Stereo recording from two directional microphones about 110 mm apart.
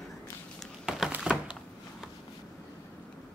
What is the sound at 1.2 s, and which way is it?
Thunk, 10° right (ahead or behind).